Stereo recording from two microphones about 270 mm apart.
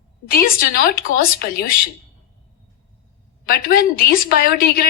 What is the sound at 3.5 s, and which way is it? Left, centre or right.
A woman's voice, left.